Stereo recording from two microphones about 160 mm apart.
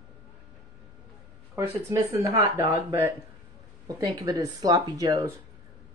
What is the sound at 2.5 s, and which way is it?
Speech, 20° right (ahead or behind).